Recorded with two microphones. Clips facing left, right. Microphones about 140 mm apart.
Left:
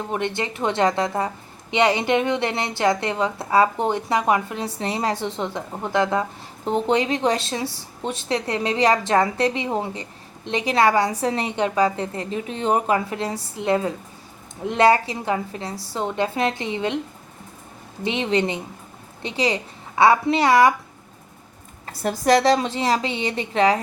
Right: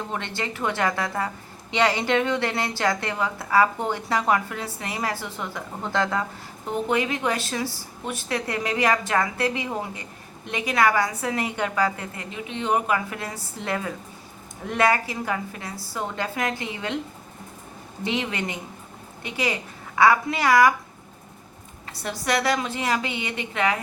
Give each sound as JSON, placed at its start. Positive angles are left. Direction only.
{"t": 0.1, "sound": "a woman's voice", "side_deg": 20}
{"t": 6.7, "sound": "a woman's voice", "side_deg": 30}
{"t": 18.0, "sound": "a woman's voice", "side_deg": 25}
{"t": 21.8, "sound": "a woman's voice", "side_deg": 40}